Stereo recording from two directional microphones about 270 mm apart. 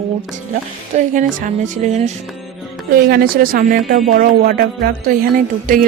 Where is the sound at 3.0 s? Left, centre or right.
Right.